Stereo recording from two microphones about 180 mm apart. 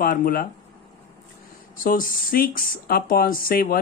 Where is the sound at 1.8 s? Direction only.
50° left (ahead or behind).